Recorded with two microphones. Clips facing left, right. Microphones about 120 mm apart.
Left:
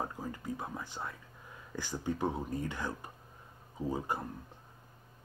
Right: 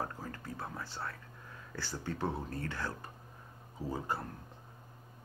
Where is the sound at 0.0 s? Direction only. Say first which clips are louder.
Left 2 dB; 15° left (ahead or behind).